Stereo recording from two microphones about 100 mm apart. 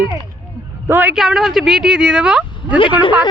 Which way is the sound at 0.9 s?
15° right (ahead or behind).